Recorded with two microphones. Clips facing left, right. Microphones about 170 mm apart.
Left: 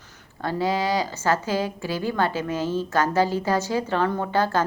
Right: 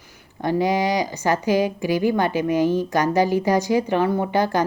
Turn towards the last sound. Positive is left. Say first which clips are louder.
# right 3 dB
turn(degrees=-15)  # may be behind; listen again after turning